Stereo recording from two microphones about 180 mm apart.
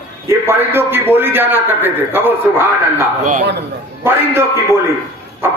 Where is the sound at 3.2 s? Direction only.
45° right (ahead or behind).